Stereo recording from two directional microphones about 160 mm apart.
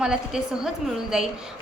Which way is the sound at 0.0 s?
5° right (ahead or behind).